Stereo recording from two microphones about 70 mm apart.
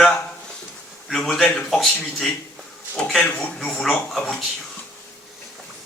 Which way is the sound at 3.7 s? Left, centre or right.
Centre.